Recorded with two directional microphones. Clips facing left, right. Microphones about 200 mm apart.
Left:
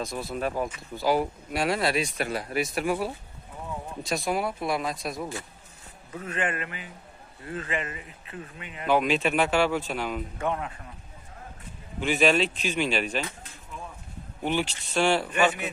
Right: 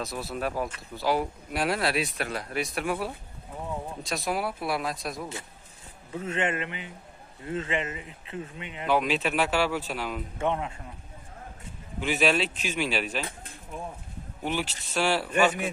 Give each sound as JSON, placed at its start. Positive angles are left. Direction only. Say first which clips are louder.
{"t": 0.0, "sound": "speech", "louder": "left 1 dB", "side_deg": 0}
{"t": 6.1, "sound": "speech", "louder": "right 2 dB", "side_deg": -25}
{"t": 8.8, "sound": "speech", "louder": "left 2 dB", "side_deg": 0}
{"t": 10.3, "sound": "speech", "louder": "right 5 dB", "side_deg": -25}
{"t": 12.0, "sound": "speech", "louder": "left 2 dB", "side_deg": 0}
{"t": 14.4, "sound": "a man's voice", "louder": "left 3 dB", "side_deg": 0}